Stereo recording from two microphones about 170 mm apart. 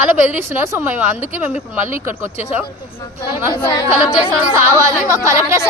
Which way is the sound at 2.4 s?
40° left (ahead or behind).